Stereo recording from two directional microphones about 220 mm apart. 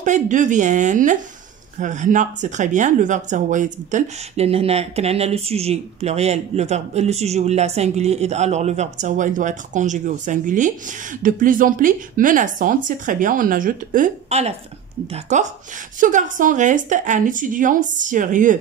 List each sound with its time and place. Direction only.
0.0 s speech: 35° right (ahead or behind)